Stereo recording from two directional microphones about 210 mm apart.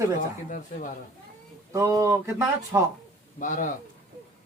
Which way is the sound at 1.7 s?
15° right (ahead or behind).